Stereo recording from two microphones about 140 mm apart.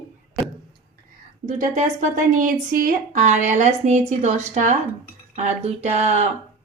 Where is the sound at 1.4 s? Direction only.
70° right (ahead or behind).